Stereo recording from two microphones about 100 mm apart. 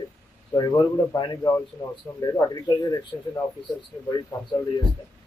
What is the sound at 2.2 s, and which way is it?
Speech, 35° left (ahead or behind).